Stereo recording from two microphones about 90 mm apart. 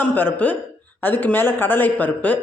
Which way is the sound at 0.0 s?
20° left (ahead or behind).